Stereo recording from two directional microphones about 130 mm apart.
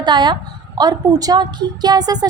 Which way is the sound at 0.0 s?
35° right (ahead or behind).